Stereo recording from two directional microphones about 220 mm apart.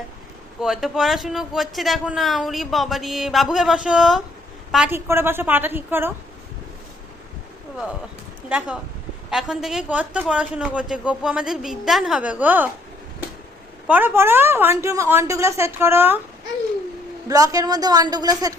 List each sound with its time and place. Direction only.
0.6 s a woman's voice: centre (ahead or behind)
8.4 s speech: 5° right (ahead or behind)
13.8 s a woman's voice: 10° right (ahead or behind)
17.2 s a woman's voice: 15° right (ahead or behind)